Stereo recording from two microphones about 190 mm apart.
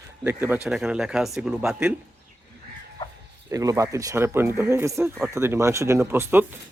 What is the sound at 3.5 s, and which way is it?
Speech, 15° right (ahead or behind).